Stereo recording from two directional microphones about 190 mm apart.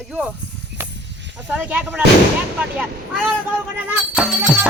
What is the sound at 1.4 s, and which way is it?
Speech, 5° right (ahead or behind).